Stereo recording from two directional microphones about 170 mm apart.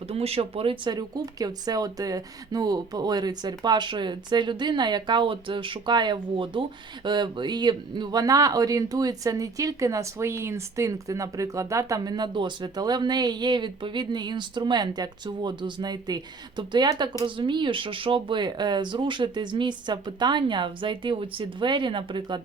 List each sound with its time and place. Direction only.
0.1 s speech: 35° right (ahead or behind)